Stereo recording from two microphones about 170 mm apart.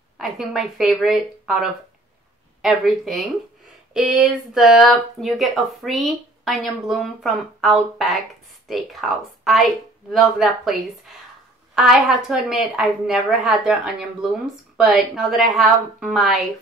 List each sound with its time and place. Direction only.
0.2 s speech: centre (ahead or behind)